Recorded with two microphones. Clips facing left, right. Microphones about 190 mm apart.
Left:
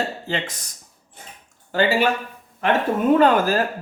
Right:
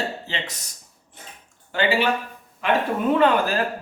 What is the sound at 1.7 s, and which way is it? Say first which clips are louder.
Speech: left 3 dB; 40° left (ahead or behind).